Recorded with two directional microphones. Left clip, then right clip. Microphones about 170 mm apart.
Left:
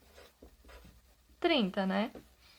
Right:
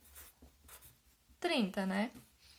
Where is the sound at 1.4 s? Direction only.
25° left (ahead or behind).